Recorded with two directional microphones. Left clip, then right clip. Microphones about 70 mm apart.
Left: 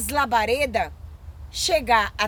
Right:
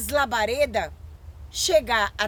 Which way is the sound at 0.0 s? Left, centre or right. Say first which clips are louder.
Left 2 dB; right.